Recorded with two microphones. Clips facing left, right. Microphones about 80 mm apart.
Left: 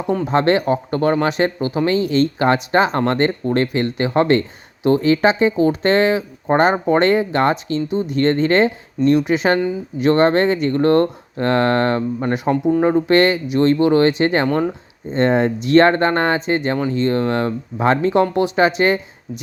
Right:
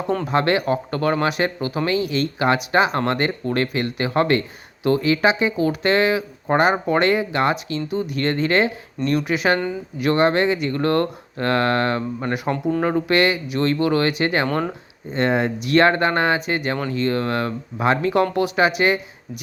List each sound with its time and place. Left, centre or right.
0.3 s speech: left
12.3 s speech: centre
13.1 s speech: left
14.4 s speech: centre
15.1 s speech: left